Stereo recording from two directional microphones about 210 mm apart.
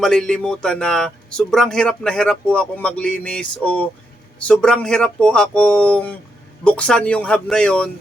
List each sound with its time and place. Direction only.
0.0 s a man's voice: 5° left (ahead or behind)